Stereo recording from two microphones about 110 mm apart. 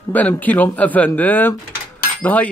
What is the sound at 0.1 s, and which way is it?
Speech, 15° left (ahead or behind).